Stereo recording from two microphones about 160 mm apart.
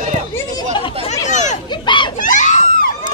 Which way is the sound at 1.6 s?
30° left (ahead or behind).